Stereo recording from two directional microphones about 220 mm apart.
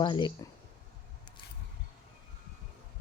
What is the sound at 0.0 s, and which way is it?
Speech, 20° left (ahead or behind).